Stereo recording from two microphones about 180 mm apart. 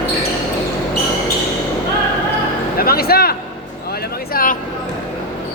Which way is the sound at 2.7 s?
55° left (ahead or behind).